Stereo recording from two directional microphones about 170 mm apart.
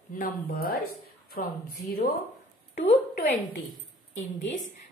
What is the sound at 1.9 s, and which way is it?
Speech, 60° left (ahead or behind).